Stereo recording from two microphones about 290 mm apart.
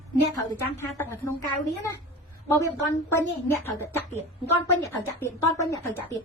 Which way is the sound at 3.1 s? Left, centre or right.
Centre.